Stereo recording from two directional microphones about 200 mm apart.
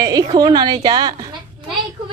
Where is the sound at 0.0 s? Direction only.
20° right (ahead or behind).